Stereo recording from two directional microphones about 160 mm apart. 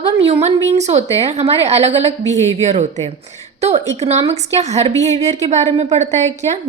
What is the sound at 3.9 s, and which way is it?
Speech, 40° right (ahead or behind).